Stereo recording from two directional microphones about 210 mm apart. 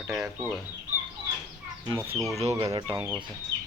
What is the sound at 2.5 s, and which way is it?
Speech, 15° right (ahead or behind).